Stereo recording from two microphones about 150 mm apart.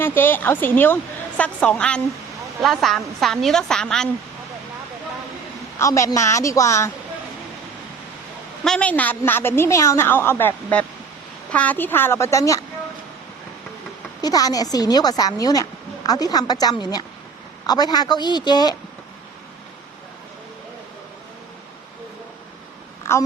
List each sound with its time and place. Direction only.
0.0 s a woman's voice: 15° left (ahead or behind)
5.8 s a woman's voice: 20° left (ahead or behind)
8.6 s a woman's voice: 5° left (ahead or behind)
14.2 s a woman's voice: 25° left (ahead or behind)
23.1 s a woman's voice: 15° left (ahead or behind)